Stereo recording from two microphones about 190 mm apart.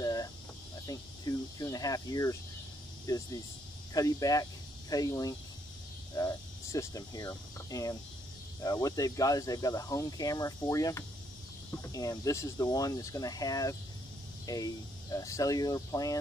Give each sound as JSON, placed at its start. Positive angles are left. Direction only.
{"t": 0.0, "sound": "cricket", "side_deg": 20}
{"t": 3.9, "sound": "speech", "side_deg": 20}